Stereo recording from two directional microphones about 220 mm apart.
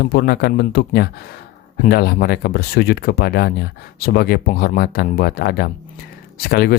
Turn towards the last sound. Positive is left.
turn(degrees=45)  # may be behind; listen again after turning